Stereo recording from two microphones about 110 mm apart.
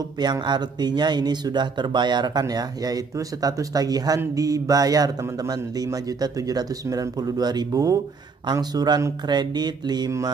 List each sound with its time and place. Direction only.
0.2 s speech: 40° right (ahead or behind)